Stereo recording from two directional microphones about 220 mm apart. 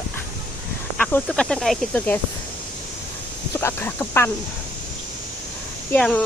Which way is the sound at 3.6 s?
10° left (ahead or behind).